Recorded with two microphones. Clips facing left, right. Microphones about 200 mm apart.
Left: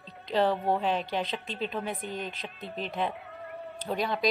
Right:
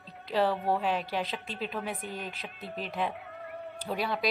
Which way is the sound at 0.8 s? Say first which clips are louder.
Left 1 dB; 5° right (ahead or behind).